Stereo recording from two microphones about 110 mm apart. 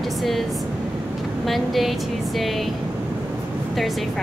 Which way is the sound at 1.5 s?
Centre (ahead or behind).